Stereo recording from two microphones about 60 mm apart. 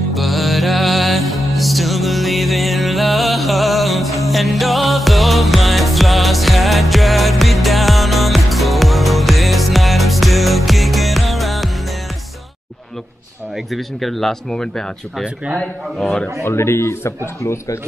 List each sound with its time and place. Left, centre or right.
0.1 s music: centre
13.7 s speech: centre
16.0 s speech: centre
16.4 s speech: left